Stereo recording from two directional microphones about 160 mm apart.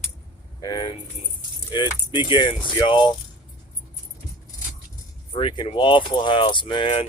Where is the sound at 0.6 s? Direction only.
25° left (ahead or behind).